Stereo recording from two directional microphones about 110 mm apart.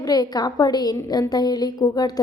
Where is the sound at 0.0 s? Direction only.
35° left (ahead or behind).